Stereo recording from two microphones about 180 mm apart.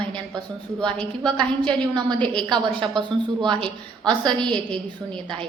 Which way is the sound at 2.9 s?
25° right (ahead or behind).